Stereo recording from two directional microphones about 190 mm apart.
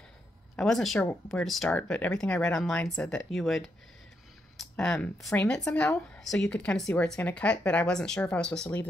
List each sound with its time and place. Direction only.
0.6 s speech: centre (ahead or behind)